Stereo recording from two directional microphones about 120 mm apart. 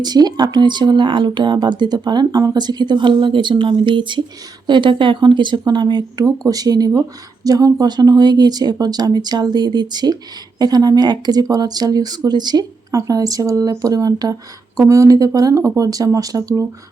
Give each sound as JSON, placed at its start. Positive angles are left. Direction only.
{"t": 0.0, "sound": "speech", "side_deg": -35}